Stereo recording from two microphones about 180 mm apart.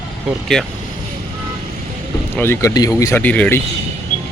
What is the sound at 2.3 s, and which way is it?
Speech, 10° left (ahead or behind).